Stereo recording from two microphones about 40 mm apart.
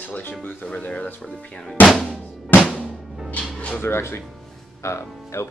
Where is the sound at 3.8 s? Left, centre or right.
Left.